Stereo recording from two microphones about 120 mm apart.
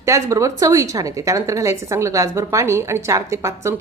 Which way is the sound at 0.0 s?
25° right (ahead or behind).